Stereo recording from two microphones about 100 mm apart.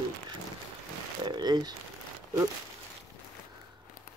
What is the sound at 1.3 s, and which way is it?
Speech, 45° right (ahead or behind).